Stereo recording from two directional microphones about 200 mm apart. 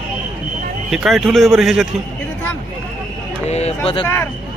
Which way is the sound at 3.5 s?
30° left (ahead or behind).